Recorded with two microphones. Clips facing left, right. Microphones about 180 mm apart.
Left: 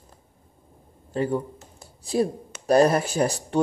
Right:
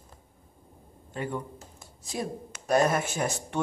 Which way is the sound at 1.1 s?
35° left (ahead or behind).